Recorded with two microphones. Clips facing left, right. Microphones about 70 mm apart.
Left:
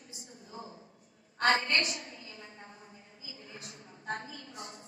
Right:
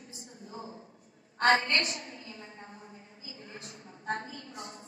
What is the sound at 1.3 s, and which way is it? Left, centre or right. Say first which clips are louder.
A woman's voice: right 2 dB; right.